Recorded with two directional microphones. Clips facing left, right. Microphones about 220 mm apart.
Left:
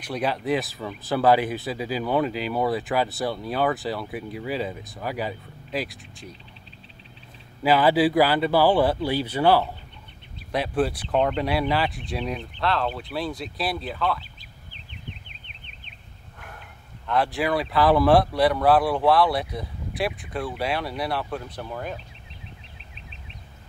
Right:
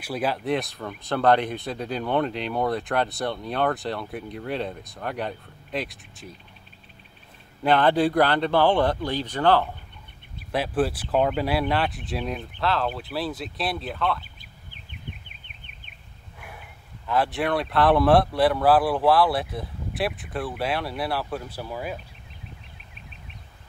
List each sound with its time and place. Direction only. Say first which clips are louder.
0.0 s speech: even; 5° right (ahead or behind)
7.6 s speech: left 1 dB; 5° left (ahead or behind)
10.5 s speech: even; centre (ahead or behind)
14.7 s a sound: even; 50° right (ahead or behind)
16.3 s speech: right 1 dB; 5° right (ahead or behind)